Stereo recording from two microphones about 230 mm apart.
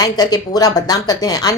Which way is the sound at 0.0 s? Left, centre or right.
Centre.